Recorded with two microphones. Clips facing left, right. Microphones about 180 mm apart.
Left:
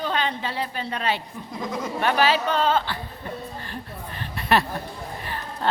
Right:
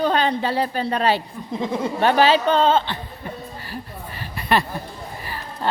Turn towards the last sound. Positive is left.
turn(degrees=0)  # may be behind; listen again after turning